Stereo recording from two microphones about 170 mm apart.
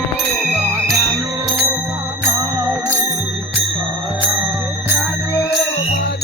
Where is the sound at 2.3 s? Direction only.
10° right (ahead or behind).